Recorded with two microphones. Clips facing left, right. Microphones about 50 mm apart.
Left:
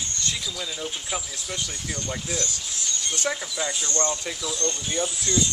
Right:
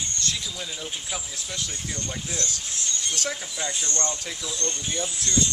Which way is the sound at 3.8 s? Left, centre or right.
Left.